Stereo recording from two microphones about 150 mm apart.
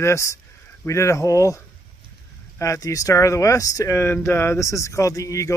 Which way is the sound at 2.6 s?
20° left (ahead or behind).